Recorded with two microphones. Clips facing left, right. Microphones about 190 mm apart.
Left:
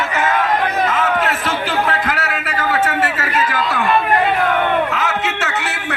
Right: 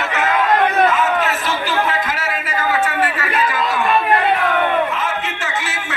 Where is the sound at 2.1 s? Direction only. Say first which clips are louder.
Left 2 dB; 65° left (ahead or behind).